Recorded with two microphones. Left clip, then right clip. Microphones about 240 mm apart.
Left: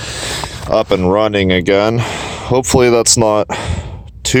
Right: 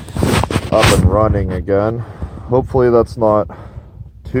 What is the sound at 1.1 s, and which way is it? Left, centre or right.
Speech, left.